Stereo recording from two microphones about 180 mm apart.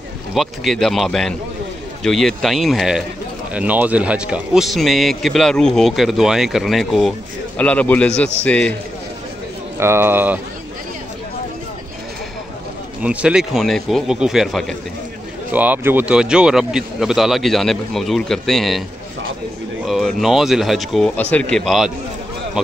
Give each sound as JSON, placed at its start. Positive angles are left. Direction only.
{"t": 0.3, "sound": "a man's voice", "side_deg": 0}
{"t": 9.8, "sound": "speech", "side_deg": -15}
{"t": 13.0, "sound": "a man's voice", "side_deg": -5}
{"t": 19.9, "sound": "a man's voice", "side_deg": 0}